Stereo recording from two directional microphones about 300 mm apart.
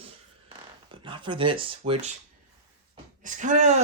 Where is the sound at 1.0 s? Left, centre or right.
Centre.